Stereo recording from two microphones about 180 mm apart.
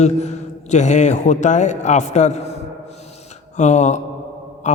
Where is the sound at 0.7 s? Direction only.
40° left (ahead or behind).